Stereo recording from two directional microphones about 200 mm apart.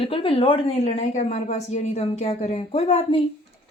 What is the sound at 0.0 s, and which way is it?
A woman's voice, 25° left (ahead or behind).